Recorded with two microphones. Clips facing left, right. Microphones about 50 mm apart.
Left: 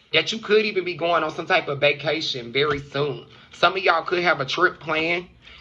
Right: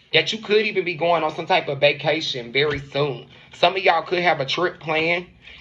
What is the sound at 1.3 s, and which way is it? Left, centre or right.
Speech, left.